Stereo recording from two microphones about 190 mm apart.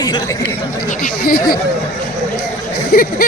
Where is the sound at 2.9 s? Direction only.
50° left (ahead or behind).